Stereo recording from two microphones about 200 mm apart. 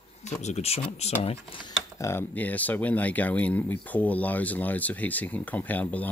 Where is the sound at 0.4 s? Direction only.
35° left (ahead or behind).